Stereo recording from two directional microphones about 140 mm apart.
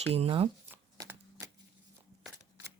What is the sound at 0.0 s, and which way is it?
Speech, 45° right (ahead or behind).